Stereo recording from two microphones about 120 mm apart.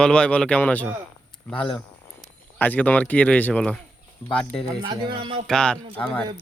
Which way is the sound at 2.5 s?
15° left (ahead or behind).